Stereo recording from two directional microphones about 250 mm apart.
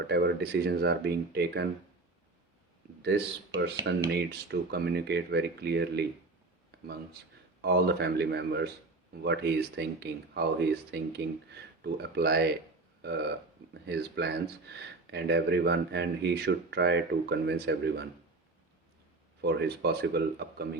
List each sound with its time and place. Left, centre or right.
0.1 s speech: right
3.0 s speech: right
7.6 s speech: right
19.4 s speech: right